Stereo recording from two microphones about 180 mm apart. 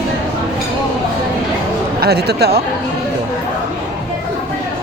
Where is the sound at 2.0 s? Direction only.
60° right (ahead or behind).